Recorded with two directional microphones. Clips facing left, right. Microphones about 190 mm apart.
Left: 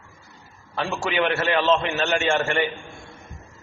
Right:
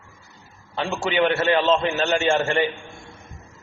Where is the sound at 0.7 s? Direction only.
25° right (ahead or behind).